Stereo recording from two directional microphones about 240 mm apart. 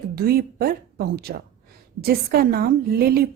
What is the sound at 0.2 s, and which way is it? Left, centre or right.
A woman's voice, right.